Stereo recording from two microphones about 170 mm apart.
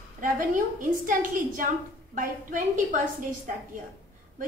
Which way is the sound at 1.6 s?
55° right (ahead or behind).